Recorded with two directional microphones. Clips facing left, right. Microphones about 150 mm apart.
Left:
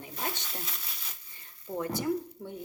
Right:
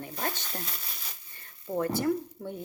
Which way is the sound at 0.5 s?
5° left (ahead or behind).